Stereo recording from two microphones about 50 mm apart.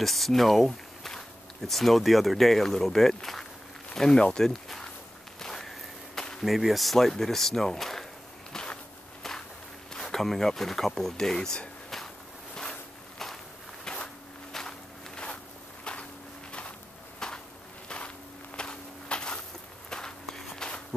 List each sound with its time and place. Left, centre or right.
0.0 s speech: centre
5.4 s walk: centre
6.4 s speech: centre
8.5 s walk: centre
9.9 s speech: centre
13.8 s walk: centre
15.8 s a sound: left
17.2 s a sound: centre
17.8 s walk: left